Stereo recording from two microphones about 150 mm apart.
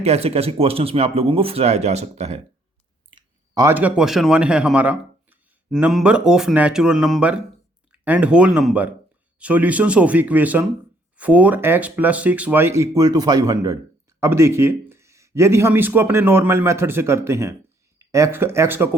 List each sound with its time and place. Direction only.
0.0 s speech: 45° right (ahead or behind)
3.1 s clicking: 30° right (ahead or behind)
3.8 s speech: 10° right (ahead or behind)